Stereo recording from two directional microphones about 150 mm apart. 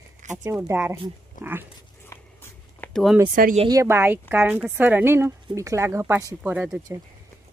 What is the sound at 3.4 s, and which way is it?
Speech, 70° right (ahead or behind).